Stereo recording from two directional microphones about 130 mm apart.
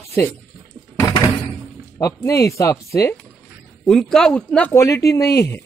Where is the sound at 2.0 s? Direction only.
20° left (ahead or behind).